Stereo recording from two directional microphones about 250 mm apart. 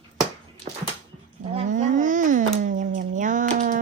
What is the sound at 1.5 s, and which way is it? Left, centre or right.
Speech, right.